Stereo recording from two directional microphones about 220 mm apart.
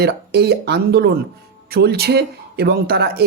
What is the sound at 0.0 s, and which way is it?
Speech, 45° right (ahead or behind).